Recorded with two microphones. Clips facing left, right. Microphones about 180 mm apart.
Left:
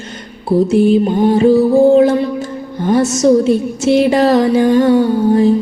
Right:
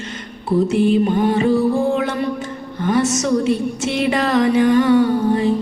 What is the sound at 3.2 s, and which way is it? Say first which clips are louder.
Music: left 7 dB; 35° left (ahead or behind).